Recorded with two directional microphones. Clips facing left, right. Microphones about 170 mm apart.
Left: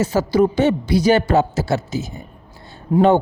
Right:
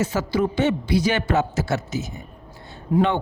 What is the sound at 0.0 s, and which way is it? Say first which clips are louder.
A man's voice: left 6 dB; 35° left (ahead or behind).